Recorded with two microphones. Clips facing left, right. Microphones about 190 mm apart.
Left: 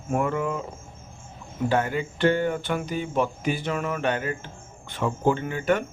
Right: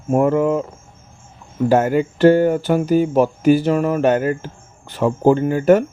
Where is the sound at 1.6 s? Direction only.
45° right (ahead or behind).